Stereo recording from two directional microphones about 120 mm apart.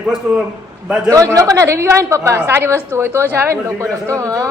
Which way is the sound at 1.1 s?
30° right (ahead or behind).